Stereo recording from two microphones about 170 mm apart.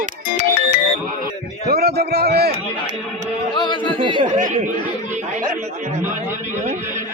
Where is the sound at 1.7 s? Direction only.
70° right (ahead or behind).